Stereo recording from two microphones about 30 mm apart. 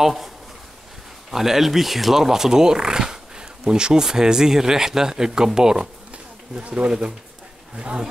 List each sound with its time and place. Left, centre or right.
0.0 s speech: centre
1.3 s speech: centre
5.8 s a sound: right
7.7 s speech: right